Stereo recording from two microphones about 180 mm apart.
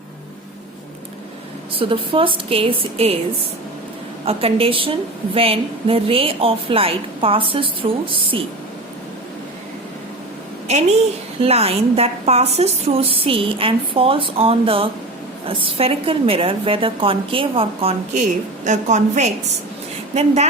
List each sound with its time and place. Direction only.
1.8 s a woman's voice: 30° right (ahead or behind)
4.3 s a woman's voice: 30° right (ahead or behind)
10.7 s a woman's voice: 40° right (ahead or behind)